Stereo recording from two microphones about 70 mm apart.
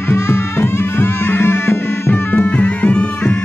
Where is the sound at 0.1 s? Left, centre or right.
Left.